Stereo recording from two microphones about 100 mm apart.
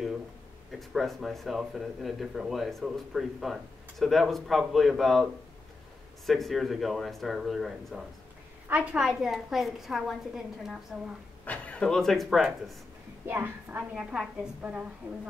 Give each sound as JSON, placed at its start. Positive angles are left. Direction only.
{"t": 0.7, "sound": "a man's voice", "side_deg": 0}
{"t": 11.4, "sound": "a man's voice", "side_deg": 15}
{"t": 13.3, "sound": "a woman's voice", "side_deg": -20}
{"t": 13.9, "sound": "a man's voice", "side_deg": -5}